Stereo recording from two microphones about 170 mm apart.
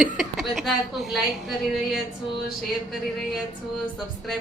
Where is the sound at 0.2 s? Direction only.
Centre (ahead or behind).